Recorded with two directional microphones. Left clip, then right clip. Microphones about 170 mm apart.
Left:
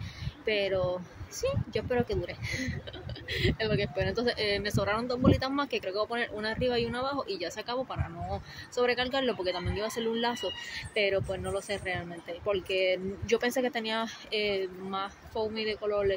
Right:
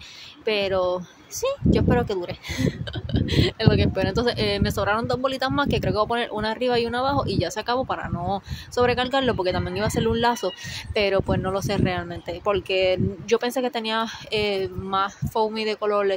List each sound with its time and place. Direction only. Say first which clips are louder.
0.5 s speech: right 6 dB; 35° right (ahead or behind)